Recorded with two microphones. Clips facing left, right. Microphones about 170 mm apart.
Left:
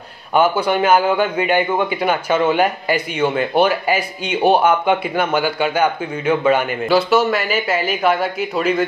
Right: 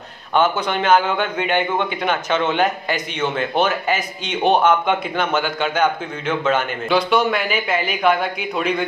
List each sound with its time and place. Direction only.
0.3 s a man's voice: 10° left (ahead or behind)